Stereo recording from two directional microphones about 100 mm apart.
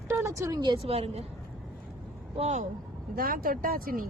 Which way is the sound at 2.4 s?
85° right.